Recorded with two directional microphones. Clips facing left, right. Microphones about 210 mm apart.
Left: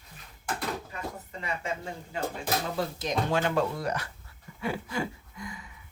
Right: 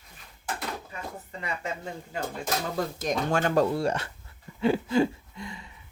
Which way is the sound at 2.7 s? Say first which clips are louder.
Right 1 dB; 45° right (ahead or behind).